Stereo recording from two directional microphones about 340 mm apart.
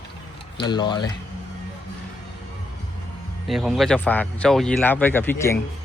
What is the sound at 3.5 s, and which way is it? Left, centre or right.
Speech, centre.